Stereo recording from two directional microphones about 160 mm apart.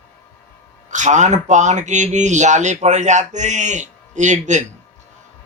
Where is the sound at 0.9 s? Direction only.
50° right (ahead or behind).